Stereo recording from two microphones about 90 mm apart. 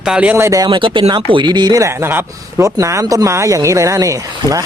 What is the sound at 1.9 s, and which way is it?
A man's voice, 25° right (ahead or behind).